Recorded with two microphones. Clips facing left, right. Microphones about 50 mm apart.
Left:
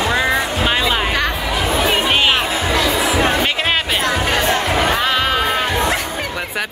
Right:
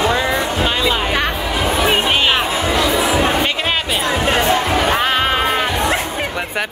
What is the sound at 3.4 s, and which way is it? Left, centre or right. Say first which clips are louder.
Music: left 1 dB; centre.